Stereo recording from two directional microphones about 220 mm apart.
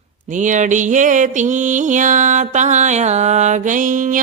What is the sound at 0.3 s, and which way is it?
Music, 35° right (ahead or behind).